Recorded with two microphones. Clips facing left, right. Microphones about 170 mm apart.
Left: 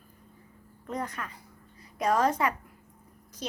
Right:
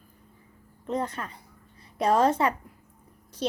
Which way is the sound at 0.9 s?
30° right (ahead or behind).